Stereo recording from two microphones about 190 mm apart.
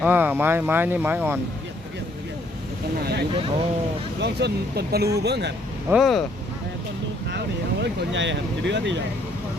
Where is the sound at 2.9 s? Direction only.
55° right (ahead or behind).